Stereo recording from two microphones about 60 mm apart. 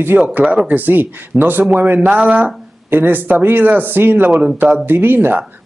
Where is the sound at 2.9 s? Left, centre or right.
Right.